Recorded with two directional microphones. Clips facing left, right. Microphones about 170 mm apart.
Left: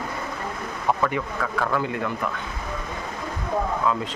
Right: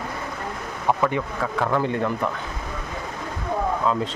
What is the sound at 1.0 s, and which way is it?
Speech, 20° right (ahead or behind).